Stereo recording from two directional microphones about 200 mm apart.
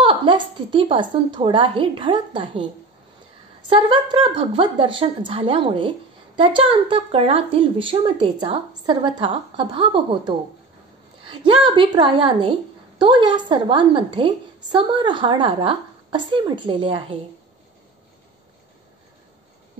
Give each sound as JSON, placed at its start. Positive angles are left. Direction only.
{"t": 0.0, "sound": "a woman's voice", "side_deg": -25}
{"t": 3.6, "sound": "a woman's voice", "side_deg": -25}